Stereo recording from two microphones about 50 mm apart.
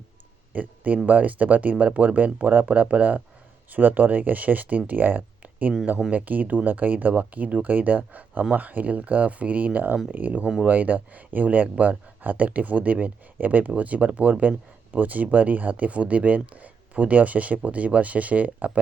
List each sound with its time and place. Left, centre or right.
0.5 s speech: right